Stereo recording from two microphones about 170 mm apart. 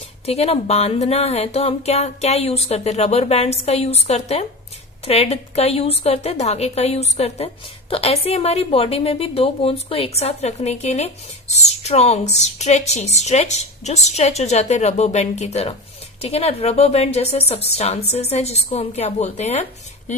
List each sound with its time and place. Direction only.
0.3 s a woman's voice: 35° left (ahead or behind)